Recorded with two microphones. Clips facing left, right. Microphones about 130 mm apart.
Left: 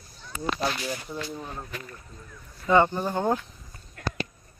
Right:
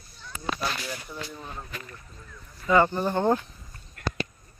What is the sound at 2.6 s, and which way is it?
Speech, 25° left (ahead or behind).